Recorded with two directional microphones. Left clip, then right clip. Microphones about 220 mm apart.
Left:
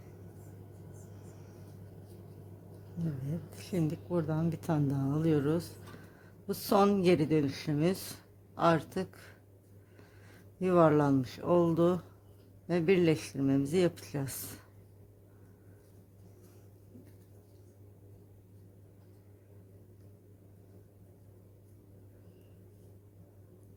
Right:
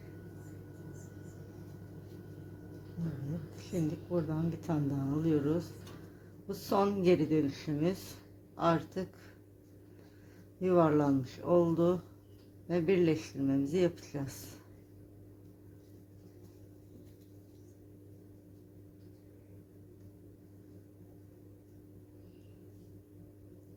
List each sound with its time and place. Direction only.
3.5 s speech: 40° left (ahead or behind)
10.6 s speech: 40° left (ahead or behind)